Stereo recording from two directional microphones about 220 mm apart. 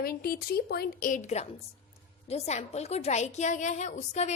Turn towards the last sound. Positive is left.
turn(degrees=30)  # may be behind; listen again after turning